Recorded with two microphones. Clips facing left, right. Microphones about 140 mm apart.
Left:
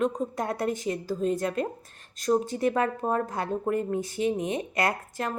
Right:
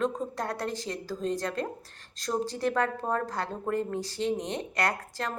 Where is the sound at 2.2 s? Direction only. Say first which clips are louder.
Left 5 dB; 20° left (ahead or behind).